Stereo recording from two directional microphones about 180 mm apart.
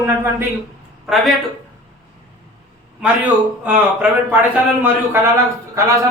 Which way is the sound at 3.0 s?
10° right (ahead or behind).